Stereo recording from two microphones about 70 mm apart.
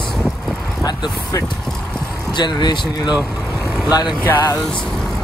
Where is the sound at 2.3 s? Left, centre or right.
Left.